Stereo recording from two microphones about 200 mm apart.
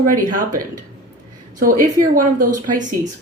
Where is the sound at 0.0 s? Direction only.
40° right (ahead or behind).